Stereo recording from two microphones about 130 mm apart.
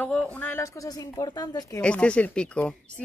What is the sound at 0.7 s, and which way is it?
Speech, 30° left (ahead or behind).